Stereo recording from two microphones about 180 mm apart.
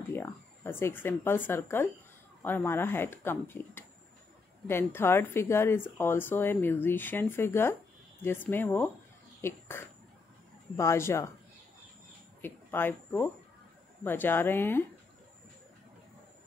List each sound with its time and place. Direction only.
0.1 s speech: 10° left (ahead or behind)
12.4 s speech: 10° left (ahead or behind)